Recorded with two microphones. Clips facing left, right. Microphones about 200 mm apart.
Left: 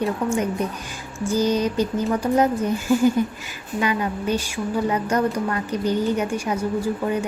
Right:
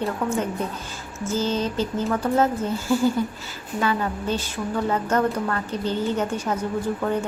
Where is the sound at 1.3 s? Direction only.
15° left (ahead or behind).